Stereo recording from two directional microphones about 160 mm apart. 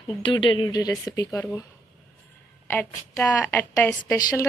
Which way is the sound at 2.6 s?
15° left (ahead or behind).